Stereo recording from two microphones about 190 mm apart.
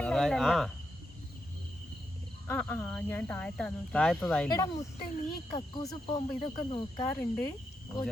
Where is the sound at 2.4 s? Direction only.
10° left (ahead or behind).